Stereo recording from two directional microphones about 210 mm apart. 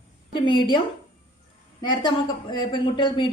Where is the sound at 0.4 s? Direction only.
20° left (ahead or behind).